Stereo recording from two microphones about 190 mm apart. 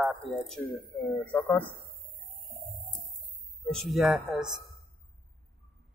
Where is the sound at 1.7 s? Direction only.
55° right (ahead or behind).